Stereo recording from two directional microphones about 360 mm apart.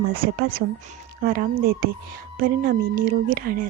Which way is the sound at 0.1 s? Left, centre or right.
Right.